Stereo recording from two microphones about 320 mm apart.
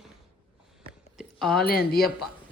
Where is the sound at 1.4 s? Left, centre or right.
Centre.